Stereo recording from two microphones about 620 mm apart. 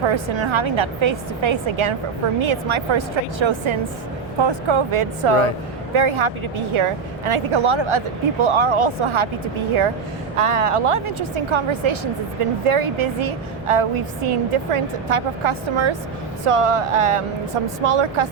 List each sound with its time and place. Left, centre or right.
0.0 s speech: right